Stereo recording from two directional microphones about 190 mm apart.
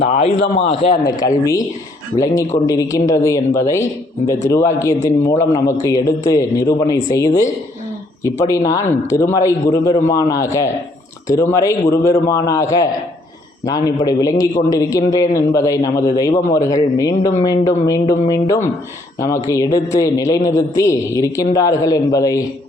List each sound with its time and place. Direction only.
0.0 s a man's voice: 35° left (ahead or behind); by 22.4 s 20° left (ahead or behind)